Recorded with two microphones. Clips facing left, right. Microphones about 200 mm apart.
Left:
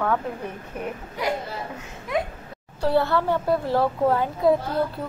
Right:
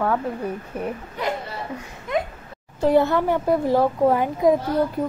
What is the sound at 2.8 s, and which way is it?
Speech, 20° right (ahead or behind).